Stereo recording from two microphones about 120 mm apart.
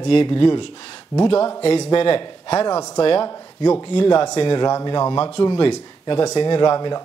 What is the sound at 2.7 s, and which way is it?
Speech, 30° left (ahead or behind).